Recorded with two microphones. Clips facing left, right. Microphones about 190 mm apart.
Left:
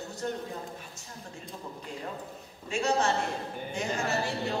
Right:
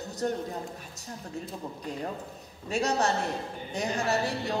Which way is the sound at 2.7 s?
35° right (ahead or behind).